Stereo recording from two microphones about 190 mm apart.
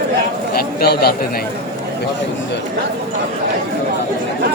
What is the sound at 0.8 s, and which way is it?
Speech, 55° left (ahead or behind).